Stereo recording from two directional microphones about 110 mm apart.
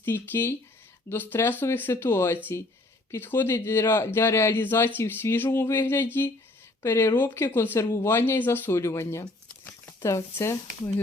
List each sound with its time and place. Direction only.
0.0 s a man's voice: 20° left (ahead or behind)